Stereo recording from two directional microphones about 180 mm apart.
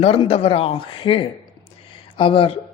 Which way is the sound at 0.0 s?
30° left (ahead or behind).